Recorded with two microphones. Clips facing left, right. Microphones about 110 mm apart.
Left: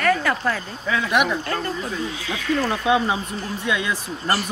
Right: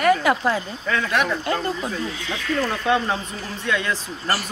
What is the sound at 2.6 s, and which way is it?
Speech, 15° left (ahead or behind).